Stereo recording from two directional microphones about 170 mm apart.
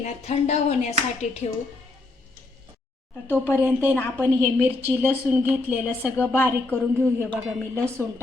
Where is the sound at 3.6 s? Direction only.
10° right (ahead or behind).